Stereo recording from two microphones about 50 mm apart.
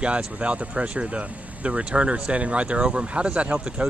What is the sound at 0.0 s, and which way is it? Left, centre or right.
Speech, right.